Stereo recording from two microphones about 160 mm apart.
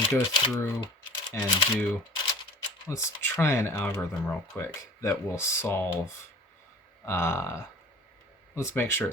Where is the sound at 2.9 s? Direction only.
15° left (ahead or behind).